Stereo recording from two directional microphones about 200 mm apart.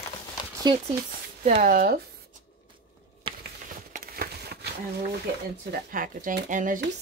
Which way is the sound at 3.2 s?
25° right (ahead or behind).